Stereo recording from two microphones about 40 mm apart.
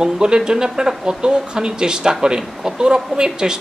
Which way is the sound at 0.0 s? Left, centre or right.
Centre.